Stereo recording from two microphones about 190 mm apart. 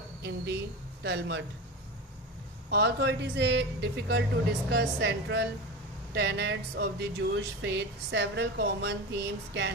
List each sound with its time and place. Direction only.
0.2 s a woman's voice: 60° right (ahead or behind)
2.6 s speech: 65° right (ahead or behind)